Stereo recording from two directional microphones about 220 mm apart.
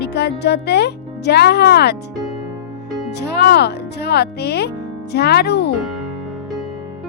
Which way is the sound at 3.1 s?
50° left (ahead or behind).